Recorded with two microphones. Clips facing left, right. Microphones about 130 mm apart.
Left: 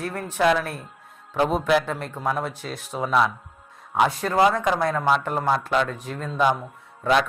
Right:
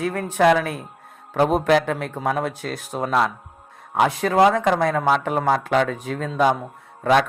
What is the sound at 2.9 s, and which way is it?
Speech, 50° right (ahead or behind).